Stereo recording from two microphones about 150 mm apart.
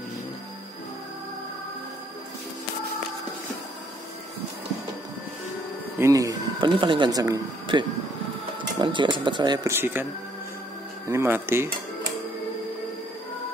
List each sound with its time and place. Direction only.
5.9 s speech: 20° right (ahead or behind)
9.7 s speech: 15° right (ahead or behind)
11.1 s speech: 15° right (ahead or behind)